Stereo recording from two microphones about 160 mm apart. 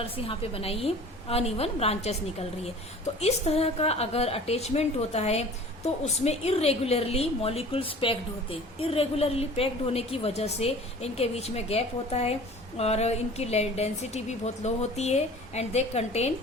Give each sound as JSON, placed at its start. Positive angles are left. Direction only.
{"t": 0.0, "sound": "a woman's voice", "side_deg": 35}
{"t": 3.2, "sound": "a woman's voice", "side_deg": 40}